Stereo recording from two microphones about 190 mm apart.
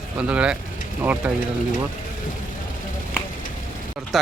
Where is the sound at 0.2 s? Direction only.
5° right (ahead or behind).